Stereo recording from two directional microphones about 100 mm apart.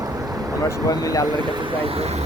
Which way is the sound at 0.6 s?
35° left (ahead or behind).